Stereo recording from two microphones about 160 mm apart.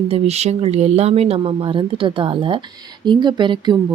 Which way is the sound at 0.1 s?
40° right (ahead or behind).